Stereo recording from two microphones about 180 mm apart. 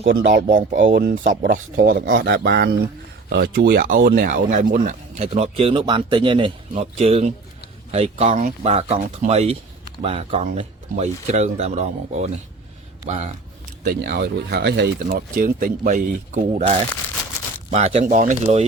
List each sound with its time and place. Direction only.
0.0 s speech: 85° right
0.4 s speech: 45° right (ahead or behind)
2.1 s speech: 65° right (ahead or behind)
3.8 s speech: 55° right (ahead or behind); by 13.3 s 35° right (ahead or behind)
13.8 s speech: 60° right (ahead or behind)
15.0 s speech: 50° right (ahead or behind)